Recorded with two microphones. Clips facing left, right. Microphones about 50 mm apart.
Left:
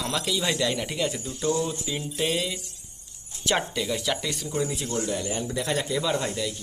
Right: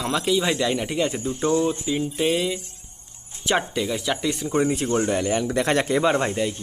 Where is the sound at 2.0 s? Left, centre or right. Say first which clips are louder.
Right 3 dB; centre.